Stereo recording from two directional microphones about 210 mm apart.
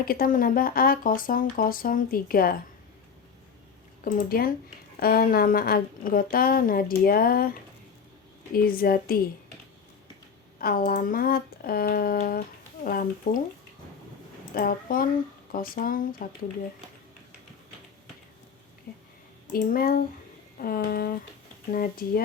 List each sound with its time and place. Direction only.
0.0 s speech: 45° left (ahead or behind)
4.0 s speech: 45° left (ahead or behind)
8.5 s speech: 45° left (ahead or behind)
10.6 s speech: 45° left (ahead or behind)
14.5 s speech: 45° left (ahead or behind)
18.9 s a sound: 45° left (ahead or behind)
19.5 s speech: 40° left (ahead or behind)